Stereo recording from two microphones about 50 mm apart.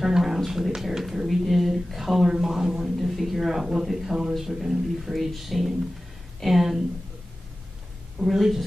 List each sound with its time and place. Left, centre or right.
0.0 s speech: centre
8.2 s speech: centre